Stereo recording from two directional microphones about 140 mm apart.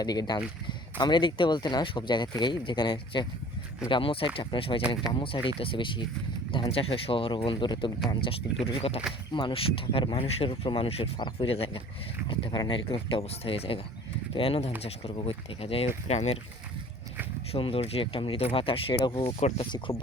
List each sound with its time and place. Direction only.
0.0 s speech: 30° left (ahead or behind); by 16.4 s 50° left (ahead or behind)
17.5 s speech: 45° left (ahead or behind)
19.2 s speech: 50° left (ahead or behind)